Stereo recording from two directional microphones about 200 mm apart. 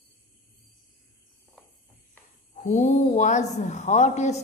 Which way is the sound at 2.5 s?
35° left (ahead or behind).